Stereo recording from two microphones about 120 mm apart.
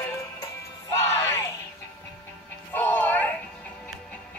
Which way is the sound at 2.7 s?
15° left (ahead or behind).